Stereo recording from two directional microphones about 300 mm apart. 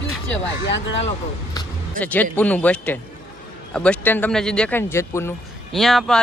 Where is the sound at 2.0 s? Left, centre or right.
Centre.